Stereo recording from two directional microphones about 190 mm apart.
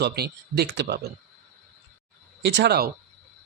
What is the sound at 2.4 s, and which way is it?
Speech, 60° right (ahead or behind).